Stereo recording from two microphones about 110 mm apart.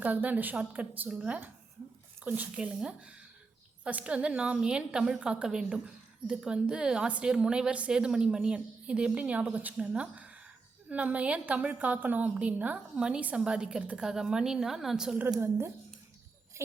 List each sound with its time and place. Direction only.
0.0 s a woman's voice: 15° right (ahead or behind)
15.4 s speech: 25° right (ahead or behind)